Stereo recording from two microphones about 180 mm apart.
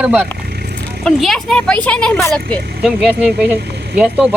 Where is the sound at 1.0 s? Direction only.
Centre (ahead or behind).